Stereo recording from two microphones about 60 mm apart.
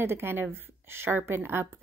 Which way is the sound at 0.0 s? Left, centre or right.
Right.